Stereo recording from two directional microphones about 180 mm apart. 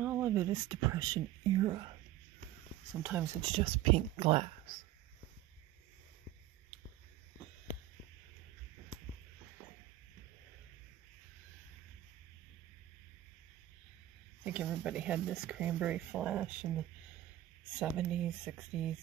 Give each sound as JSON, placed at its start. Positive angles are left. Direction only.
{"t": 0.0, "sound": "speech", "side_deg": -10}
{"t": 2.9, "sound": "speech", "side_deg": -10}
{"t": 3.4, "sound": "speech", "side_deg": -30}
{"t": 14.4, "sound": "speech", "side_deg": -5}
{"t": 17.7, "sound": "speech", "side_deg": -5}